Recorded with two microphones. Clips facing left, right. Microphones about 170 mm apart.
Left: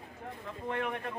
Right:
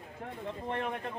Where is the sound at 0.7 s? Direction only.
30° right (ahead or behind).